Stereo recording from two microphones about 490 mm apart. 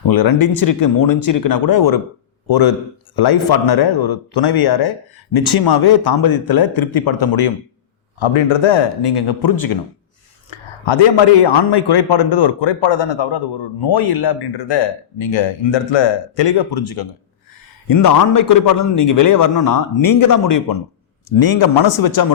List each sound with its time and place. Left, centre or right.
0.1 s speech: left
8.2 s speech: left
10.5 s a sound: left
10.8 s speech: left
17.8 s a man's voice: left